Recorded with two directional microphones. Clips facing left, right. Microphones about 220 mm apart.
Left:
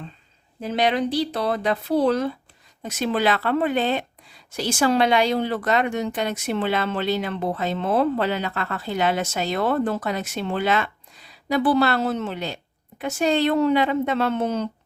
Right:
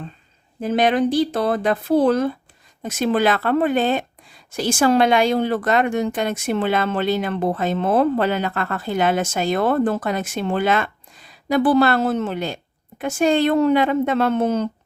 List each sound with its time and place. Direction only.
0.6 s speech: 50° right (ahead or behind)